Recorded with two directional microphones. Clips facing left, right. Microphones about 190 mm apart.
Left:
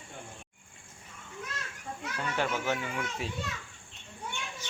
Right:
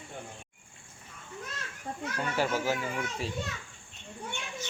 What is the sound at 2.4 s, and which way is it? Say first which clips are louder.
Speech: right 2 dB; 5° right (ahead or behind).